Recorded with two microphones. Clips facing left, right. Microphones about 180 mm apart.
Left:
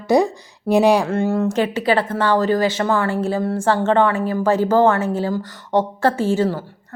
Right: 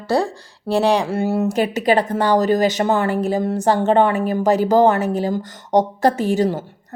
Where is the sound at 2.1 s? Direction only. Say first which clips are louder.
Right 1 dB; 15° right (ahead or behind).